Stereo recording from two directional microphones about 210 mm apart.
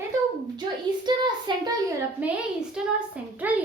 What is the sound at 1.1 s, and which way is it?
Speech, 20° right (ahead or behind).